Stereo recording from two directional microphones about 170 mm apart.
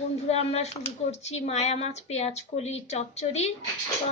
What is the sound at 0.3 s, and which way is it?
A woman's voice, 40° left (ahead or behind).